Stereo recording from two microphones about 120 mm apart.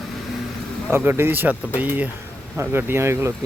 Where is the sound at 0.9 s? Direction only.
20° right (ahead or behind).